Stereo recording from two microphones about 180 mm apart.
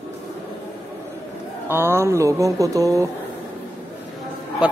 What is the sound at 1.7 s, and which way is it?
Speech, 15° right (ahead or behind).